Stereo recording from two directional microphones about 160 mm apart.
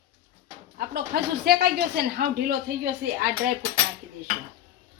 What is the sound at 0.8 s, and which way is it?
Speech, 80° right.